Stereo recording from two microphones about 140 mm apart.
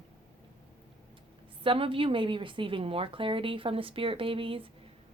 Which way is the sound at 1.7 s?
40° right (ahead or behind).